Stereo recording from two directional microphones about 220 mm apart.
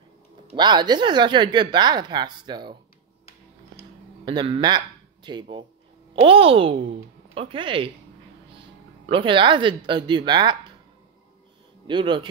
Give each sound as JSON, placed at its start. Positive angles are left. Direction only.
{"t": 0.5, "sound": "speech", "side_deg": -20}
{"t": 4.2, "sound": "speech", "side_deg": -20}
{"t": 9.0, "sound": "speech", "side_deg": -25}
{"t": 11.9, "sound": "speech", "side_deg": -20}